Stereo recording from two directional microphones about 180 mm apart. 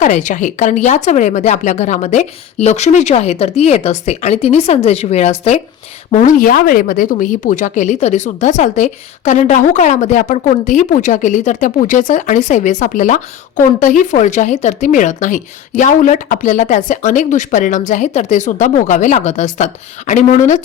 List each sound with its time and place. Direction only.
0.0 s speech: 40° left (ahead or behind)